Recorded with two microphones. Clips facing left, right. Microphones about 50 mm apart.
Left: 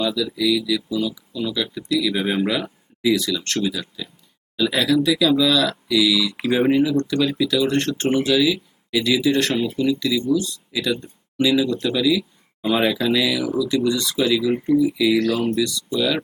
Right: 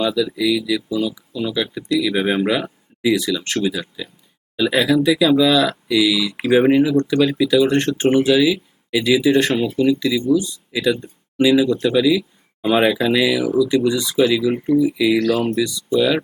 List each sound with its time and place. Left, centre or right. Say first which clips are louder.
0.2 s speech: right 2 dB; centre
1.3 s speech: right 3 dB; centre
1.7 s speech: right 3 dB; centre
10.9 s a sound: right 3 dB; centre
11.4 s speech: right 4 dB; centre
13.4 s speech: right 5 dB; centre
13.7 s speech: right 3 dB; centre
14.7 s speech: right 1 dB; centre